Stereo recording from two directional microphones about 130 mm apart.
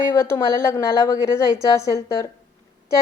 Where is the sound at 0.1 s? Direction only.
20° left (ahead or behind).